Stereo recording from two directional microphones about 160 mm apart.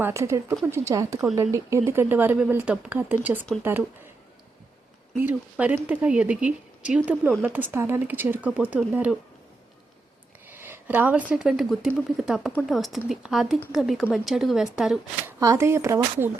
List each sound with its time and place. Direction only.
0.0 s speech: 15° right (ahead or behind)
5.1 s speech: 10° right (ahead or behind)
10.4 s a woman's voice: 15° right (ahead or behind)
15.4 s speech: 20° right (ahead or behind)